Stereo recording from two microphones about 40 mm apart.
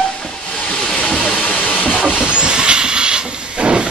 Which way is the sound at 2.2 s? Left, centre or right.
Right.